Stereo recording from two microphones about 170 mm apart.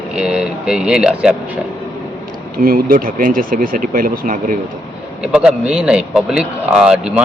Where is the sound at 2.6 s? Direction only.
60° right (ahead or behind).